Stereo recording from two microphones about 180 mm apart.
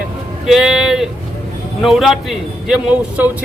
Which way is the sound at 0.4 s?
5° right (ahead or behind).